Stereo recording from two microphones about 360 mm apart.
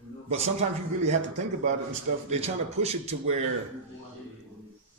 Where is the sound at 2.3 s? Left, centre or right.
Centre.